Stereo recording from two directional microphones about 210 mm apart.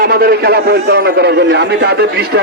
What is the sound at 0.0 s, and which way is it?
A man's voice, 45° right (ahead or behind).